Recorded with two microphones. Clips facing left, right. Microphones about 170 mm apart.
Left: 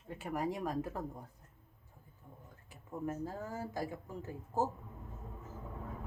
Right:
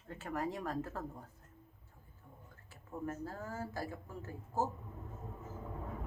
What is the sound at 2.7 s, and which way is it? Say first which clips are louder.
Speech: left 2 dB; 15° left (ahead or behind).